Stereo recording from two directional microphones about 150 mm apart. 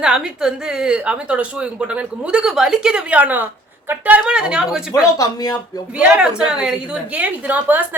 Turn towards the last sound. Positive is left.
turn(degrees=-10)  # may be behind; listen again after turning